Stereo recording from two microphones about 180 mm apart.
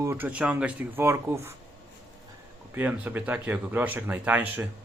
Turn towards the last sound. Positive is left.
turn(degrees=-10)  # may be behind; listen again after turning